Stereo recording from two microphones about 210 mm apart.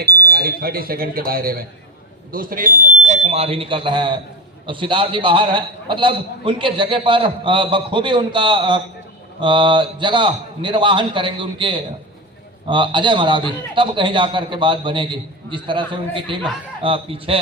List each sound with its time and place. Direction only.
0.0 s a man's voice: 45° right (ahead or behind); by 17.3 s 25° right (ahead or behind)